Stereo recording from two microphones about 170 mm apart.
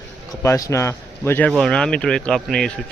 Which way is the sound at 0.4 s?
20° left (ahead or behind).